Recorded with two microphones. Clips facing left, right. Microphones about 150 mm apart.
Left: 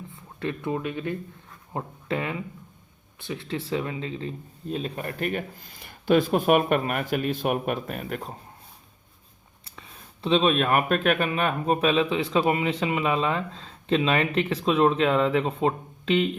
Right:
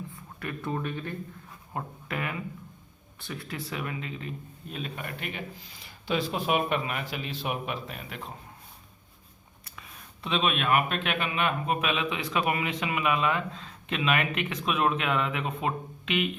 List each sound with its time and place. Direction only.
0.1 s a sound: 25° left (ahead or behind)
0.7 s speech: 15° left (ahead or behind)
1.7 s speech: 25° left (ahead or behind); by 8.3 s 50° left (ahead or behind)
9.6 s speech: 30° left (ahead or behind)